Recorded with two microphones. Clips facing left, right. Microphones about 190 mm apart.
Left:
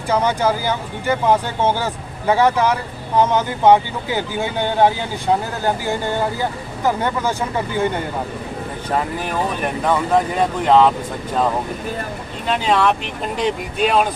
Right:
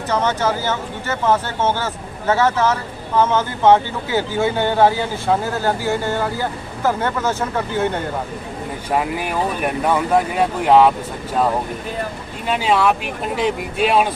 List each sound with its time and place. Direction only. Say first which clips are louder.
0.1 s speech: left 2 dB; 10° left (ahead or behind)
8.9 s speech: right 1 dB; 10° right (ahead or behind)
12.5 s speech: even; 10° right (ahead or behind)